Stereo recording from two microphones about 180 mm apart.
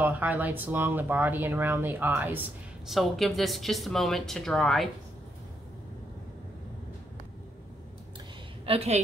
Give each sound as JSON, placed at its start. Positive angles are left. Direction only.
{"t": 0.0, "sound": "speech", "side_deg": -10}
{"t": 2.9, "sound": "a woman's voice", "side_deg": 0}
{"t": 8.6, "sound": "a woman's voice", "side_deg": -35}